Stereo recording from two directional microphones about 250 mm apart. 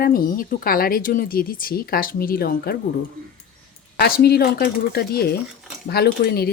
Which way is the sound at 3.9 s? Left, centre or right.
Left.